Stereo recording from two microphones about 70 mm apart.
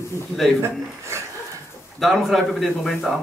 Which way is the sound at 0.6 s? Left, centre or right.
Right.